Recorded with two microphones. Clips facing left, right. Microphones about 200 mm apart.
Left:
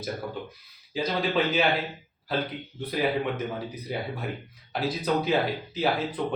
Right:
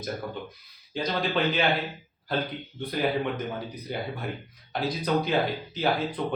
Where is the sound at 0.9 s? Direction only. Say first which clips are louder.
Left 1 dB; 5° left (ahead or behind).